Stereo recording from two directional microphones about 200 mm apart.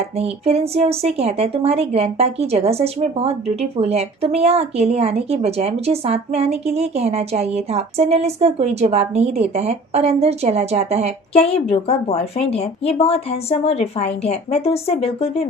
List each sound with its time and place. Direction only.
0.2 s a woman's voice: 30° right (ahead or behind)
11.3 s a woman's voice: 30° left (ahead or behind)